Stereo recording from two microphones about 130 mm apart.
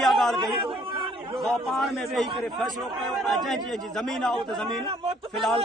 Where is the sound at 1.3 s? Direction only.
Centre (ahead or behind).